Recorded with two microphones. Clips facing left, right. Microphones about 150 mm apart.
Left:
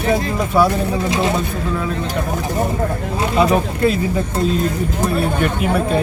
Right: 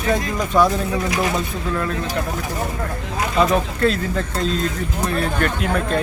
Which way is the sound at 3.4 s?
10° left (ahead or behind).